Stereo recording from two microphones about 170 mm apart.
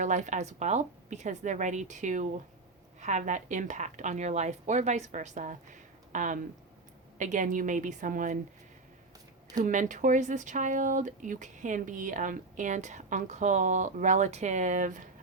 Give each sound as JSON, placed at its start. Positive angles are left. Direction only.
{"t": 0.0, "sound": "speech", "side_deg": -45}
{"t": 9.6, "sound": "speech", "side_deg": -45}